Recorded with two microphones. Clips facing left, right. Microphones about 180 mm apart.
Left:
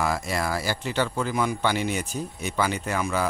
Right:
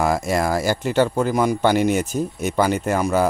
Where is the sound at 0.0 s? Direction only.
45° right (ahead or behind).